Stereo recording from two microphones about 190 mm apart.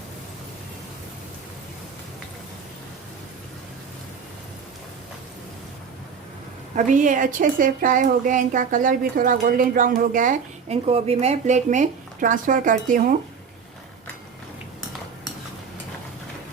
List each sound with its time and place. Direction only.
6.7 s a woman's voice: 40° right (ahead or behind)